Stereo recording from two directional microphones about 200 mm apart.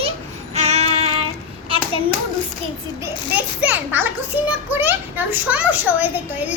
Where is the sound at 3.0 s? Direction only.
10° right (ahead or behind).